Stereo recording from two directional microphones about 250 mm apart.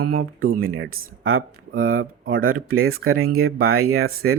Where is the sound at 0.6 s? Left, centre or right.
Right.